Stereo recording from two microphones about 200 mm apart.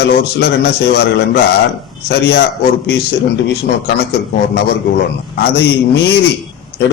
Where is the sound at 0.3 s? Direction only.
55° left (ahead or behind).